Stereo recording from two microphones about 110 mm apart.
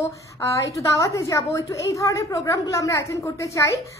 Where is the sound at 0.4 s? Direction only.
30° left (ahead or behind).